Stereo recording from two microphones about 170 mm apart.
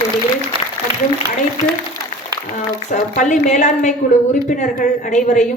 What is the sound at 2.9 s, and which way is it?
A woman's voice, 45° left (ahead or behind).